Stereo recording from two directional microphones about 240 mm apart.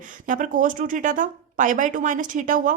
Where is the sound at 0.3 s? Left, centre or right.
Right.